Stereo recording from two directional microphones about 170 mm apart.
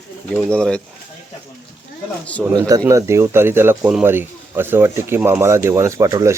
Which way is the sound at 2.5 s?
20° right (ahead or behind).